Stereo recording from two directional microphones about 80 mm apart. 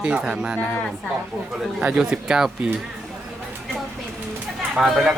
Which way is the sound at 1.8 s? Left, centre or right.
Centre.